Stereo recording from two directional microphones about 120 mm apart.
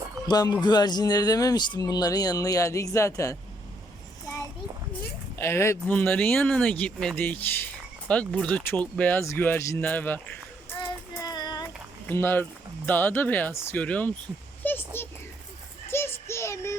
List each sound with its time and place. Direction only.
0.3 s speech: 35° left (ahead or behind)
5.4 s a man's voice: 20° left (ahead or behind)
10.8 s child singing: 35° left (ahead or behind)
12.0 s speech: 20° left (ahead or behind)
14.6 s a sound: 15° left (ahead or behind)
15.9 s child singing: 20° left (ahead or behind)